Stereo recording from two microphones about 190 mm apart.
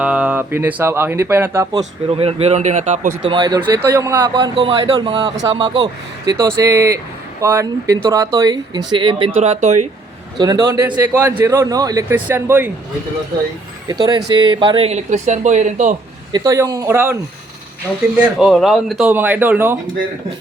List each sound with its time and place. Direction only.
0.0 s speech: 5° right (ahead or behind)
1.8 s speech: 30° right (ahead or behind)
3.2 s speech: 25° right (ahead or behind)
10.3 s speech: 20° right (ahead or behind)
13.8 s speech: 20° right (ahead or behind); by 16.0 s 40° right (ahead or behind)
16.3 s speech: 15° right (ahead or behind)
18.2 s speech: 5° right (ahead or behind)